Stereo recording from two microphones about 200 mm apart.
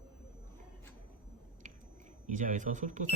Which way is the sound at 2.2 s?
40° right (ahead or behind).